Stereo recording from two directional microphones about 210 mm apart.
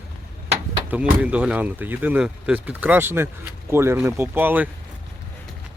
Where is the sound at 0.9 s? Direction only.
5° right (ahead or behind).